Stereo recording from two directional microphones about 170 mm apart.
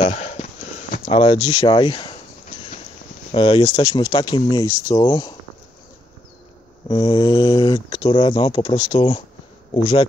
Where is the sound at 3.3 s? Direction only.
30° left (ahead or behind).